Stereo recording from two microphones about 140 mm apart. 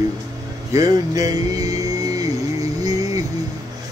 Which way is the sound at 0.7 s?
25° right (ahead or behind).